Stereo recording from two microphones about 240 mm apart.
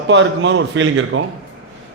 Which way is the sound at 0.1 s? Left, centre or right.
Right.